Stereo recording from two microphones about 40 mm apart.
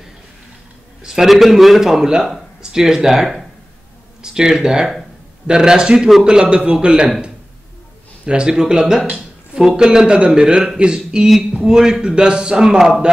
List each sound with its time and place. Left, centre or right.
1.0 s a man's voice: centre; by 7.1 s right
8.3 s a man's voice: centre
12.7 s a man's voice: centre